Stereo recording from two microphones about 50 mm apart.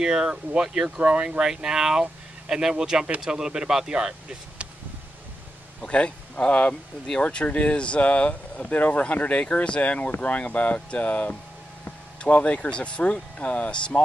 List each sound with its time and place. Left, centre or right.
0.0 s speech: centre
1.4 s speech: centre
5.8 s speech: left